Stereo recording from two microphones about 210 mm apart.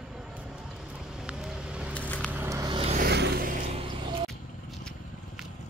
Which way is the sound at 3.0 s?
50° right (ahead or behind).